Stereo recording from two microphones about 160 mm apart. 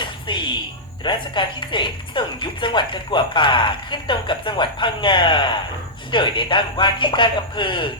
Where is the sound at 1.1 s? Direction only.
30° left (ahead or behind).